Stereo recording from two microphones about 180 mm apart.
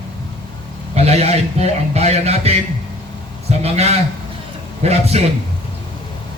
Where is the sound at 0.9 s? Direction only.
35° right (ahead or behind).